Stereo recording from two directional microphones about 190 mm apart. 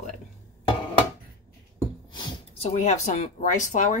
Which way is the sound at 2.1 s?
25° left (ahead or behind).